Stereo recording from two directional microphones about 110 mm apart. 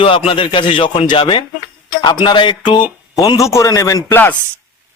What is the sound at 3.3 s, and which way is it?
Speech, 30° left (ahead or behind).